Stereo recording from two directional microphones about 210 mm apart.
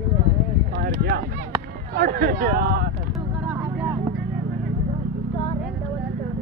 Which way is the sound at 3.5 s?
5° right (ahead or behind).